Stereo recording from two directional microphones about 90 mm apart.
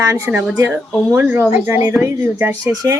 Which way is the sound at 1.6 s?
20° right (ahead or behind).